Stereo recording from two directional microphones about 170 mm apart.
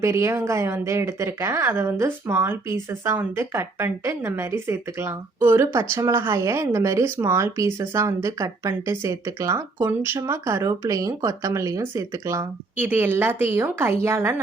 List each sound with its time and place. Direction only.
0.0 s speech: 15° right (ahead or behind)